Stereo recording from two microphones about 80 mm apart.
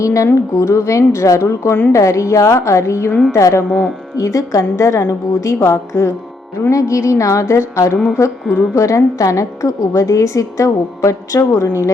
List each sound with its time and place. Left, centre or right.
0.0 s a woman's voice: left